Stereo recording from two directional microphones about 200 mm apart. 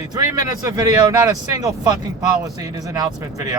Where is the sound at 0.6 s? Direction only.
15° right (ahead or behind).